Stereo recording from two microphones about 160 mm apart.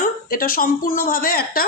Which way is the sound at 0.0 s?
60° left (ahead or behind).